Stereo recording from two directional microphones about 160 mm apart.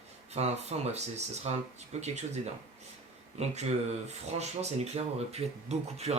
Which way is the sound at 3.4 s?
45° right (ahead or behind).